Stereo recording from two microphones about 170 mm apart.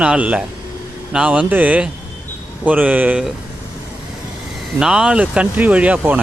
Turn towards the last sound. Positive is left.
turn(degrees=-10)  # may be behind; listen again after turning